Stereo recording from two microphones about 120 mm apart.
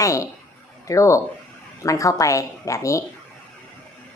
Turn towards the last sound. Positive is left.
turn(degrees=25)  # may be behind; listen again after turning